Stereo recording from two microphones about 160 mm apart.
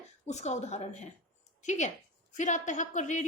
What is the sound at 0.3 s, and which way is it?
A woman's voice, 45° left (ahead or behind).